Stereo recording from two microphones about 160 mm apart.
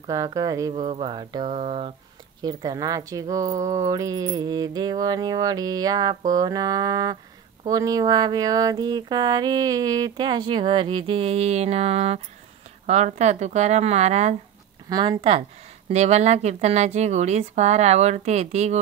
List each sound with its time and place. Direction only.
0.0 s speech: 20° right (ahead or behind); by 2.0 s 35° right (ahead or behind)
2.4 s speech: 25° right (ahead or behind); by 14.3 s 45° right (ahead or behind)
14.9 s speech: 25° right (ahead or behind)
15.1 s speech: 40° right (ahead or behind)